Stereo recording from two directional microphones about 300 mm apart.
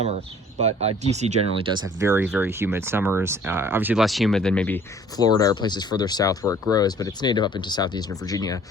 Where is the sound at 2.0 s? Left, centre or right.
Centre.